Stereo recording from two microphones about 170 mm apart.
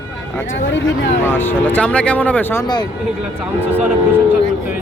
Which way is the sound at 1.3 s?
10° left (ahead or behind).